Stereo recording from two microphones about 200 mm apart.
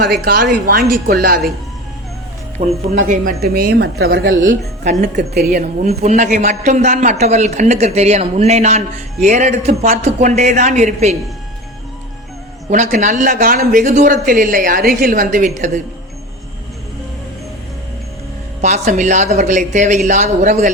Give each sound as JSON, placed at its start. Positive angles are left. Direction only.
{"t": 0.3, "sound": "a woman's voice", "side_deg": -45}
{"t": 2.6, "sound": "a woman's voice", "side_deg": -40}
{"t": 4.8, "sound": "a man's voice", "side_deg": -40}
{"t": 5.3, "sound": "a woman's voice", "side_deg": -50}
{"t": 5.8, "sound": "a man's voice", "side_deg": -35}
{"t": 12.7, "sound": "a man's voice", "side_deg": -35}
{"t": 18.6, "sound": "a man's voice", "side_deg": -35}